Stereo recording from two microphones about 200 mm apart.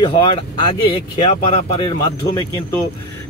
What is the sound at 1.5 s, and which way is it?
Speech, 25° left (ahead or behind).